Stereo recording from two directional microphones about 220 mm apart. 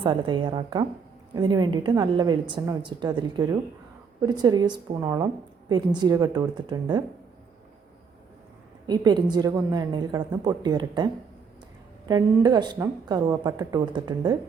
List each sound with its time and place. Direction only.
0.0 s a woman's voice: 20° right (ahead or behind)
8.9 s a woman's voice: 20° right (ahead or behind)